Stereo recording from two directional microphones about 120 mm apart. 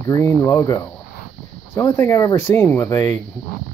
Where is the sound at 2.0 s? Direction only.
25° left (ahead or behind).